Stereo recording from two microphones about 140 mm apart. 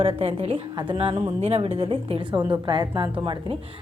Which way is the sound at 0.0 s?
45° right (ahead or behind).